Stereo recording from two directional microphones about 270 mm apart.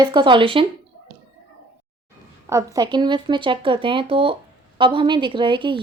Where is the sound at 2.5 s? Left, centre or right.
Centre.